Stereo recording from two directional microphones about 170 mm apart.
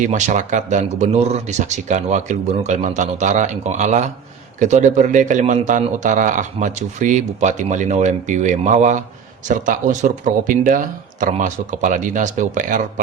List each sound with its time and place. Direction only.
0.0 s speech: 45° right (ahead or behind)